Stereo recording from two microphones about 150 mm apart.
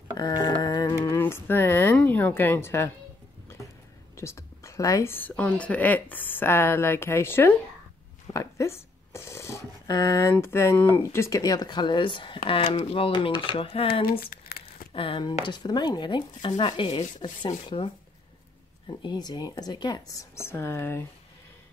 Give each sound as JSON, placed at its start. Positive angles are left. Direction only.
{"t": 0.1, "sound": "a sound", "side_deg": 25}
{"t": 4.2, "sound": "a woman's voice", "side_deg": 20}
{"t": 14.2, "sound": "crumpling", "side_deg": 85}
{"t": 14.9, "sound": "speech", "side_deg": 35}